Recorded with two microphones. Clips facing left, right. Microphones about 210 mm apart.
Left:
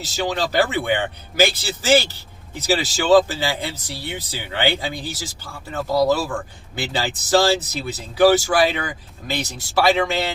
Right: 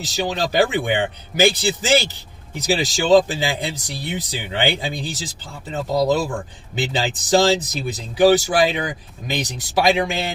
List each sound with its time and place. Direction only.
0.2 s speech: 15° right (ahead or behind)